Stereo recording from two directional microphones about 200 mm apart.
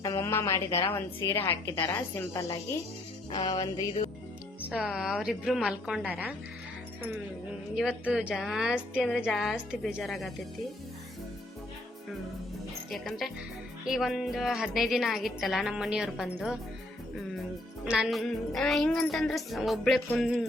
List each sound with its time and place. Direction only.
0.0 s a sound: 15° left (ahead or behind)
0.9 s speech: 10° left (ahead or behind)
3.3 s music: 20° left (ahead or behind)
4.7 s a woman's voice: centre (ahead or behind)
7.8 s a woman's voice: 5° right (ahead or behind)
12.9 s a woman's voice: centre (ahead or behind)
17.8 s a woman's voice: 5° right (ahead or behind)